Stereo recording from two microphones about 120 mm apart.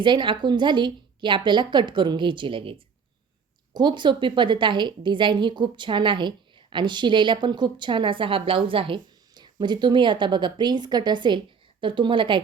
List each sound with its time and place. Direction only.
0.0 s a woman's voice: 40° right (ahead or behind)